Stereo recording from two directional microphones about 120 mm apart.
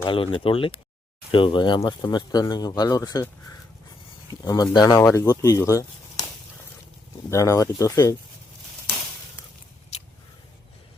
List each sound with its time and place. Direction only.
0.0 s speech: 45° left (ahead or behind)
4.4 s speech: 35° left (ahead or behind)
5.0 s speech: 25° left (ahead or behind)
7.3 s speech: 25° left (ahead or behind)